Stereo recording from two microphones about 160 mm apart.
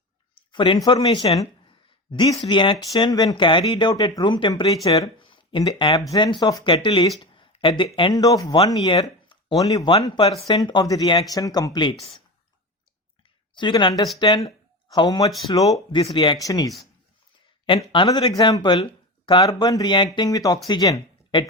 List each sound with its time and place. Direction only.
0.5 s speech: 30° left (ahead or behind)
7.2 s a sound: 30° left (ahead or behind)
7.9 s speech: 25° left (ahead or behind)
13.6 s speech: 30° left (ahead or behind)
15.9 s speech: 35° left (ahead or behind)
17.9 s speech: 30° left (ahead or behind)